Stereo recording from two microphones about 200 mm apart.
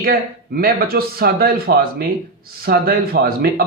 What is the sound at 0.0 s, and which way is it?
A man's voice, 50° right (ahead or behind).